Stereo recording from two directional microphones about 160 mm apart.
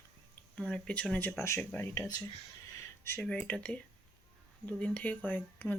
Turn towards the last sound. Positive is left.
turn(degrees=10)  # may be behind; listen again after turning